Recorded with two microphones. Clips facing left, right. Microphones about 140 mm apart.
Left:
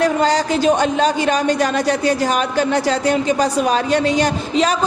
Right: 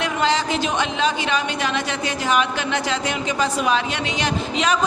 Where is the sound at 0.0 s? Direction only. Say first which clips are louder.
Left 5 dB; 40° left (ahead or behind).